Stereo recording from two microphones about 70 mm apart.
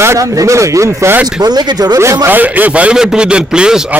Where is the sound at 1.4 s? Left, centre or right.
Right.